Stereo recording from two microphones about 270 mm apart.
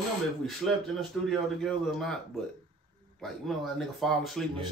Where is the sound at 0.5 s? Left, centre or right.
Centre.